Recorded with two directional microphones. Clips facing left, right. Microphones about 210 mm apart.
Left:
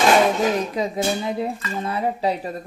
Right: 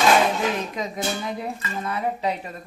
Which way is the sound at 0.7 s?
30° left (ahead or behind).